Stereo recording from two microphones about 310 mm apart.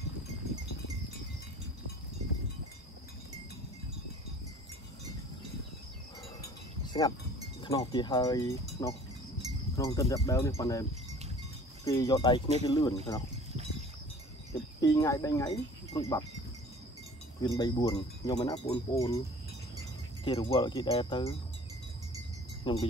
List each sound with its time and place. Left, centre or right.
6.8 s wind chime: centre
7.6 s speech: centre
14.5 s speech: centre
17.4 s speech: centre
20.2 s speech: centre
22.7 s speech: centre